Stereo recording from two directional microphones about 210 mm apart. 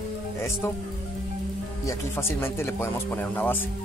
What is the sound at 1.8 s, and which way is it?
Speech, 10° left (ahead or behind).